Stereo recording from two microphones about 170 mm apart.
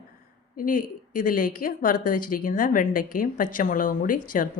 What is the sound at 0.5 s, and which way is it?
A woman's voice, 55° left (ahead or behind).